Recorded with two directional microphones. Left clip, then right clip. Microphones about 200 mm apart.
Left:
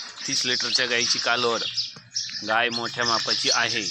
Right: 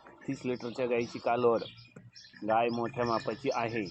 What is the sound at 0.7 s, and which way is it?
Speech, 5° left (ahead or behind).